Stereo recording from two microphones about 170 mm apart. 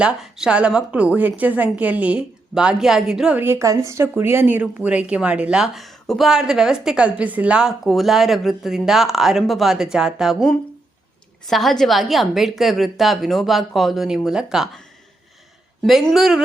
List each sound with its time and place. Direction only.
0.0 s a woman's voice: 5° right (ahead or behind)